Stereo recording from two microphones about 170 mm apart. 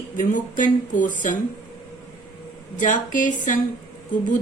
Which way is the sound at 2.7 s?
50° left (ahead or behind).